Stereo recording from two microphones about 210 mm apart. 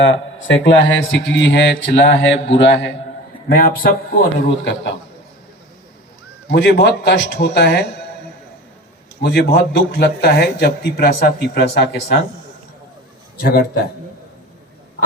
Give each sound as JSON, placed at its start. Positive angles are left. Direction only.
{"t": 0.0, "sound": "a man's voice", "side_deg": 65}
{"t": 3.6, "sound": "a man's voice", "side_deg": 40}
{"t": 4.4, "sound": "a man's voice", "side_deg": 55}
{"t": 6.5, "sound": "a man's voice", "side_deg": 55}
{"t": 9.2, "sound": "a man's voice", "side_deg": 50}
{"t": 13.4, "sound": "a man's voice", "side_deg": 45}